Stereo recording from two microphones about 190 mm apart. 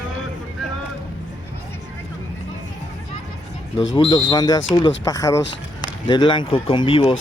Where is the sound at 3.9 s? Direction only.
20° left (ahead or behind).